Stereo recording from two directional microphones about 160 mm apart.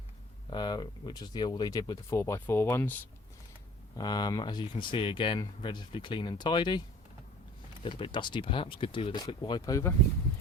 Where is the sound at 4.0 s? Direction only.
25° left (ahead or behind).